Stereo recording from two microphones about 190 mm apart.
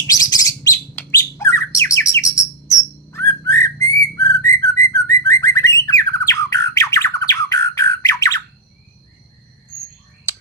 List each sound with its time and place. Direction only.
0.1 s bird: 20° left (ahead or behind)
3.1 s whistling: 15° left (ahead or behind)
4.9 s bird: 15° left (ahead or behind)